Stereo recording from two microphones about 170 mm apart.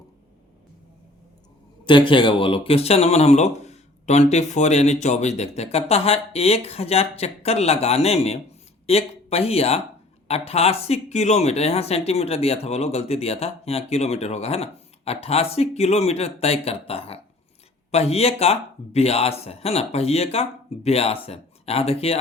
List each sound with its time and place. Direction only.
1.8 s speech: 30° left (ahead or behind)